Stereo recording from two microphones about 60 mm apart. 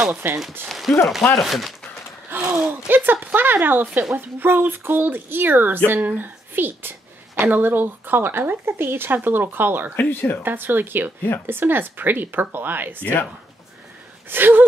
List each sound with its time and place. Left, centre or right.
0.1 s speech: right
0.7 s speech: centre
2.3 s speech: right
2.9 s a woman's voice: right
9.9 s speech: left
10.4 s speech: right
14.3 s speech: right